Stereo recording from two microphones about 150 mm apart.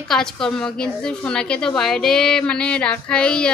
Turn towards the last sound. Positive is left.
turn(degrees=5)  # may be behind; listen again after turning